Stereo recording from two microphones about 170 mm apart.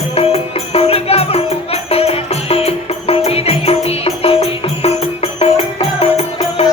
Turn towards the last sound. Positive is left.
turn(degrees=35)  # may be behind; listen again after turning